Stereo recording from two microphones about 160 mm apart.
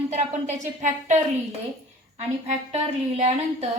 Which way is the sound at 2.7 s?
40° right (ahead or behind).